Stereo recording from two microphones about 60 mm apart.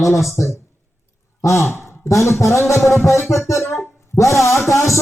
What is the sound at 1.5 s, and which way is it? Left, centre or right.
Music, left.